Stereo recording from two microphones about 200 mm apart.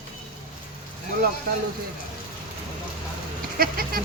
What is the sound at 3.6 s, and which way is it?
Goat, 45° right (ahead or behind).